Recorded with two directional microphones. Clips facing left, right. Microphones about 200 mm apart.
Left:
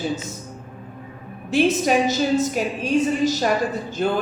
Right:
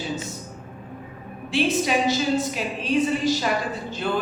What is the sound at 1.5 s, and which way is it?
A woman's voice, 45° left (ahead or behind).